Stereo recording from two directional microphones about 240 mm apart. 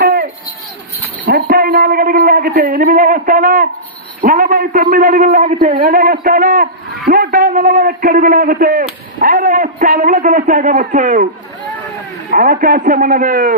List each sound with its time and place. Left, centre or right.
0.0 s a sound: right
1.2 s a man's voice: right
12.3 s a man's voice: right